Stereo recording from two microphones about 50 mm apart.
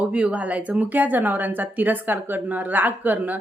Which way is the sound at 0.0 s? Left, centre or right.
Right.